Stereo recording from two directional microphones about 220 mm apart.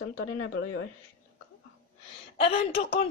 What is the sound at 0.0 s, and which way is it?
Speech, 60° left (ahead or behind).